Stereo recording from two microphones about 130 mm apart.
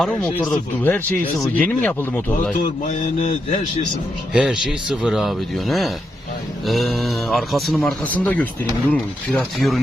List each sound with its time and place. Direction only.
0.0 s speech: 10° left (ahead or behind)
2.8 s a man's voice: 60° left (ahead or behind)
4.4 s a man's voice: 5° right (ahead or behind); by 9.4 s 10° left (ahead or behind)
9.6 s a man's voice: centre (ahead or behind)